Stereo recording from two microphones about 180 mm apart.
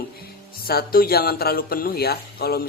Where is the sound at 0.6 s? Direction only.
55° left (ahead or behind).